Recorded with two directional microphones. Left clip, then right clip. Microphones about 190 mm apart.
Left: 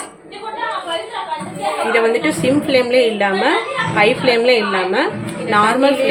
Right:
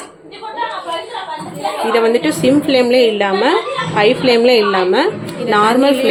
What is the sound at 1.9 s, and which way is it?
A woman's voice, 30° right (ahead or behind).